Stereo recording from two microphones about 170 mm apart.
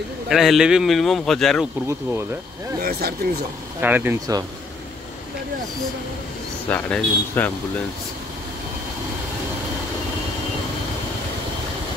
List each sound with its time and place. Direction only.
0.3 s a man's voice: centre (ahead or behind)
2.8 s speech: 65° right (ahead or behind)
3.8 s speech: 10° right (ahead or behind)
6.7 s speech: 10° left (ahead or behind)